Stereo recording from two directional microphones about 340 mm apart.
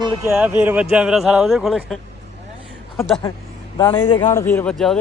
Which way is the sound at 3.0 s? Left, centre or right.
Centre.